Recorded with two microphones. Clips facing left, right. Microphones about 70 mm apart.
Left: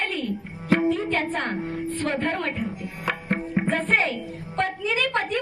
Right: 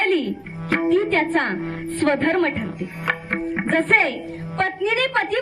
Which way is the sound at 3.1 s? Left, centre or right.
Right.